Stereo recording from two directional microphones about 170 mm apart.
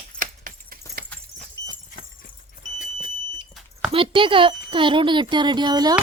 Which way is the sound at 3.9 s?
30° right (ahead or behind).